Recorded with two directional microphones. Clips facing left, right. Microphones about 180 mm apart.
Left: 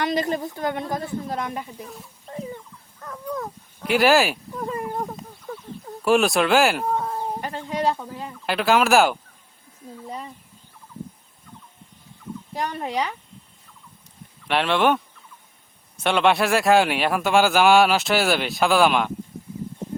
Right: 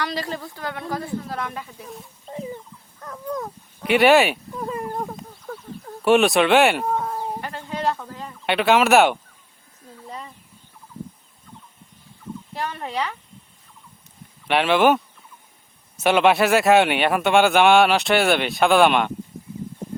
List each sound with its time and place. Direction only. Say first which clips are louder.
0.0 s a woman's voice: left 4 dB; 20° left (ahead or behind)
2.3 s a sound: right 1 dB; 15° right (ahead or behind)
3.0 s a sound: right 1 dB; centre (ahead or behind)
6.0 s speech: right 2 dB; centre (ahead or behind)
7.4 s speech: left 3 dB; 15° left (ahead or behind)
8.4 s a man's voice: right 2 dB; centre (ahead or behind)
12.8 s speech: left 1 dB; 15° left (ahead or behind)
14.4 s a man's voice: right 3 dB; centre (ahead or behind)